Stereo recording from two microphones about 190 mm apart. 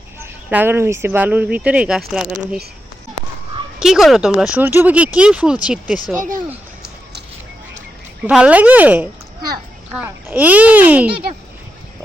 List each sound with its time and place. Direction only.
0.2 s speech: 10° right (ahead or behind)
3.8 s speech: centre (ahead or behind)
6.1 s speech: 45° right (ahead or behind)
8.2 s speech: 5° right (ahead or behind)